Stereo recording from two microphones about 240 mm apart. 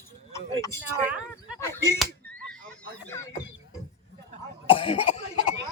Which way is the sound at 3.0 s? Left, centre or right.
Centre.